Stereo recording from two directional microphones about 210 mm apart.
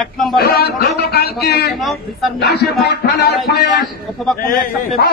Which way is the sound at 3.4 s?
Centre (ahead or behind).